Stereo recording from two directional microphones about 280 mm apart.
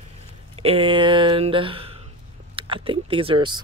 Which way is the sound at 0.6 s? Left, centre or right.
Centre.